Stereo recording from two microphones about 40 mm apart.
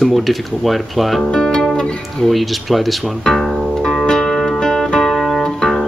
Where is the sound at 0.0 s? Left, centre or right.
Centre.